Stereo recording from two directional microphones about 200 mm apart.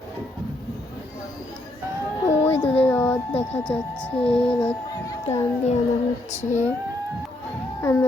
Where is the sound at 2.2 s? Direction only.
10° left (ahead or behind).